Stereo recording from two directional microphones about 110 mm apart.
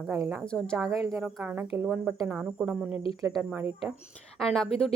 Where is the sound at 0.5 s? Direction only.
5° left (ahead or behind).